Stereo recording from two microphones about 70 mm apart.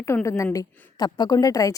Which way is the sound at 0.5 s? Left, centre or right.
Left.